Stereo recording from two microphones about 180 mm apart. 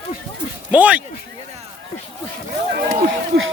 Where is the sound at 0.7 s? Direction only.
5° right (ahead or behind).